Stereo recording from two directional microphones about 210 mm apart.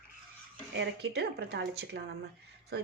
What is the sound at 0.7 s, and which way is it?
Speech, 55° right (ahead or behind).